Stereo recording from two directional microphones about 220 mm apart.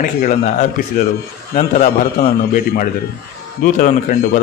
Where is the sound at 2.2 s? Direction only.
40° left (ahead or behind).